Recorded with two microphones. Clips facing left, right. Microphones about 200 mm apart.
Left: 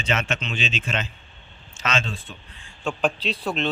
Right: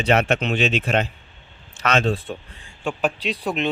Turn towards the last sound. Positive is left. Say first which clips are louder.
# right 2 dB
turn(degrees=-15)  # may be behind; listen again after turning